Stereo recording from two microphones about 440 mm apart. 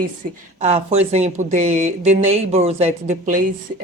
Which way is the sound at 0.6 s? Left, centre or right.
Centre.